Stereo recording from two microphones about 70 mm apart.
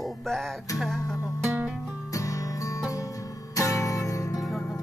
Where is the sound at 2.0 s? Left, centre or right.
Left.